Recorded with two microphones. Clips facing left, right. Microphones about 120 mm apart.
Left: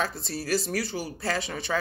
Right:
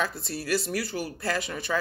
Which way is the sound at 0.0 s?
35° left (ahead or behind).